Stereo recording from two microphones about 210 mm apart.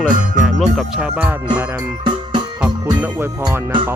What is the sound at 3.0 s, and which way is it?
Music, 10° right (ahead or behind).